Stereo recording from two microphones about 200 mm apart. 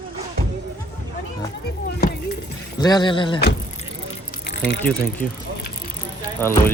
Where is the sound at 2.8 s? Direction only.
20° left (ahead or behind).